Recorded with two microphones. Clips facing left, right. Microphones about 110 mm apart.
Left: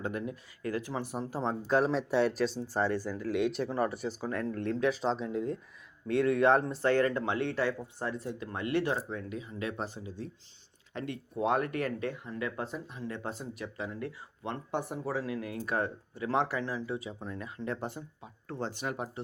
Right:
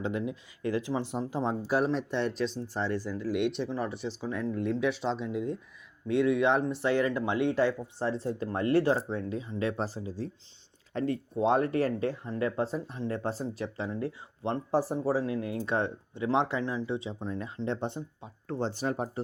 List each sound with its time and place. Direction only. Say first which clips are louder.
0.0 s speech: right 3 dB; 20° right (ahead or behind)
1.7 s speech: left 2 dB; centre (ahead or behind)
7.2 s speech: right 4 dB; 15° right (ahead or behind); by 19.2 s 40° right (ahead or behind)